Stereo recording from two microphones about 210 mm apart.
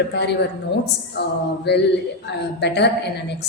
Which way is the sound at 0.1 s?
55° left (ahead or behind).